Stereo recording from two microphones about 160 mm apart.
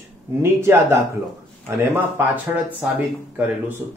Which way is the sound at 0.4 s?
15° right (ahead or behind).